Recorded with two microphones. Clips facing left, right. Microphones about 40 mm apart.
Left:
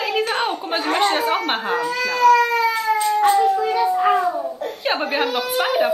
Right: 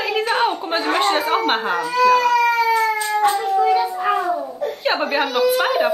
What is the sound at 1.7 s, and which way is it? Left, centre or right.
Speech, right.